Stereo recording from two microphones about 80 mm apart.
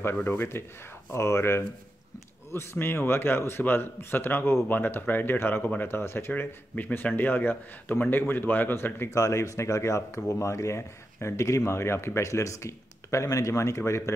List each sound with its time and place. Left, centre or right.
0.0 s speech: left
9.1 s speech: left